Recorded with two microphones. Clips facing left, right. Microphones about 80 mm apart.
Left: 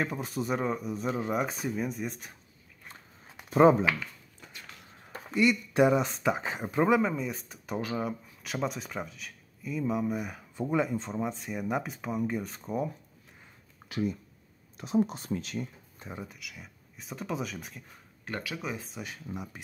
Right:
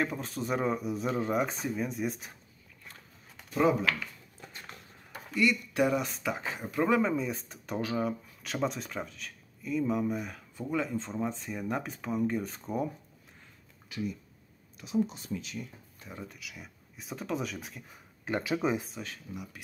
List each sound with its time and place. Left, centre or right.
0.0 s speech: centre
3.4 s speech: left
5.1 s speech: left
6.9 s speech: centre
10.5 s speech: left; by 12.9 s centre
13.8 s speech: left
14.8 s speech: left
15.6 s speech: left
16.3 s speech: centre
18.2 s speech: right
19.3 s speech: left